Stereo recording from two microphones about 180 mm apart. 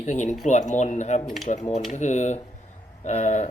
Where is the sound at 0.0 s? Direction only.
40° left (ahead or behind).